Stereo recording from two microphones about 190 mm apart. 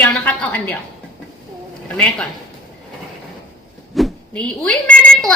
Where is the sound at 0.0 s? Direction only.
10° left (ahead or behind).